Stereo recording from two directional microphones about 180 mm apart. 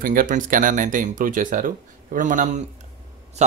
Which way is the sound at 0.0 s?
50° right (ahead or behind).